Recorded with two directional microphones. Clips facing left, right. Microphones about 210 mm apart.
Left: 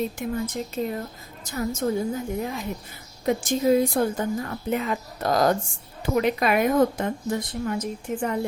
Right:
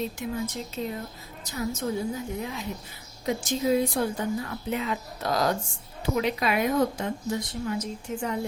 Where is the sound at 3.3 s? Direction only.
50° left (ahead or behind).